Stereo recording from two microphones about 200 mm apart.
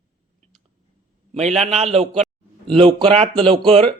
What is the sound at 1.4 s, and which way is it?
A man's voice, 35° right (ahead or behind).